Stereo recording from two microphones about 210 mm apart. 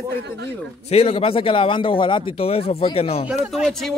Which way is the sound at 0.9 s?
30° left (ahead or behind).